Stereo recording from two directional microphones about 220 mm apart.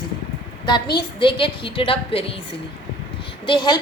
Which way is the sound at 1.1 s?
25° left (ahead or behind).